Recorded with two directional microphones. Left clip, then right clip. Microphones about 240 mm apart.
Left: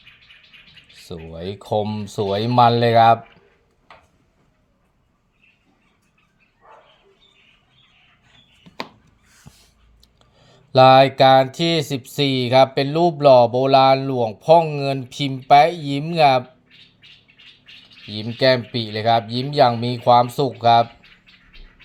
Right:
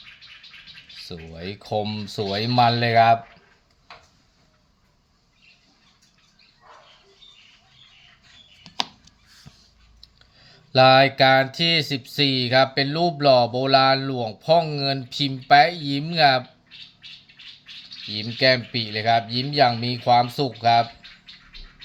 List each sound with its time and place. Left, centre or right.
1.0 s speech: centre
9.5 s a sound: centre
10.3 s speech: centre
18.1 s speech: centre